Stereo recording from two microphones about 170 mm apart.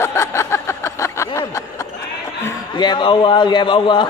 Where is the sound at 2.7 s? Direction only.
25° left (ahead or behind).